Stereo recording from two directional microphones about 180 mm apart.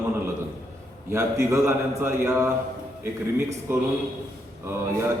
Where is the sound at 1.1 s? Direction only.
15° right (ahead or behind).